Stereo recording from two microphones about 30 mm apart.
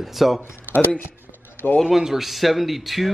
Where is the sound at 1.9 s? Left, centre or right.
Centre.